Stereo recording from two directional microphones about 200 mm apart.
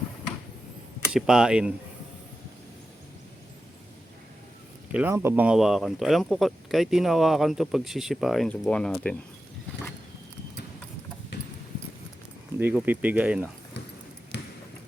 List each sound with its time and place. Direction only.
1.0 s speech: 5° right (ahead or behind)
4.9 s speech: 10° right (ahead or behind)
12.5 s speech: 10° right (ahead or behind)
14.3 s basketball bounce: 60° left (ahead or behind)